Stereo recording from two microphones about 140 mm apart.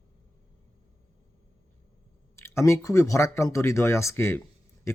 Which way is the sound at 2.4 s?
20° left (ahead or behind).